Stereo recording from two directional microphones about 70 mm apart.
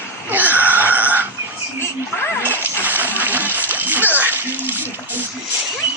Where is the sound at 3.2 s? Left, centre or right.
Right.